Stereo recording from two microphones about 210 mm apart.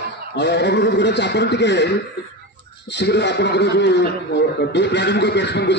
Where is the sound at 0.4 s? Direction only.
55° left (ahead or behind).